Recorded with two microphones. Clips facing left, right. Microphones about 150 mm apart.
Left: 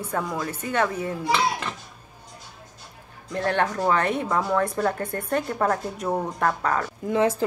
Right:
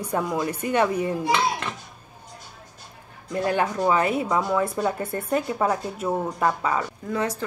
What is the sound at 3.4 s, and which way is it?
Speech, 10° right (ahead or behind).